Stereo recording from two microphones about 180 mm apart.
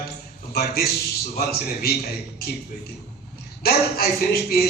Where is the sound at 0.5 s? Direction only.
60° left (ahead or behind).